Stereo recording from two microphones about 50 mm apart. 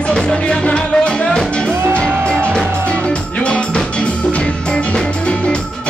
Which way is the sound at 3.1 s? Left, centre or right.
Left.